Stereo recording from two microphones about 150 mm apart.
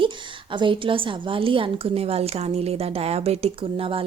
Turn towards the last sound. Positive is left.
turn(degrees=-35)  # may be behind; listen again after turning